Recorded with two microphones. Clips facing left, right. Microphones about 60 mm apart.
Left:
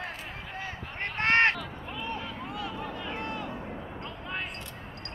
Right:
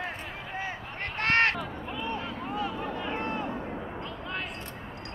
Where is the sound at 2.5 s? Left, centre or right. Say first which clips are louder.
Right 6 dB; right.